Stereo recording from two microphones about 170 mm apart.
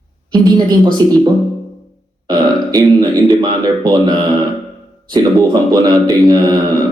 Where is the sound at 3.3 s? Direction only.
25° right (ahead or behind).